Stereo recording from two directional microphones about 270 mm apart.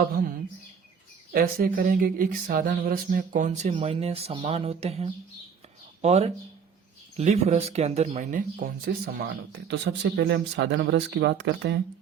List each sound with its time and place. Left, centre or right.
0.0 s speech: right